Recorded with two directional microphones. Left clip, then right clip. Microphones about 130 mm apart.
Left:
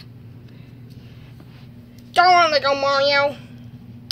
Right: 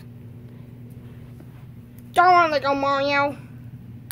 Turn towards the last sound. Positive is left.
turn(degrees=-20)  # may be behind; listen again after turning